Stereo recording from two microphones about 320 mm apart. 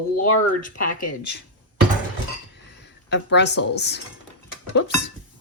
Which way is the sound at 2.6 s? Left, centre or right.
Left.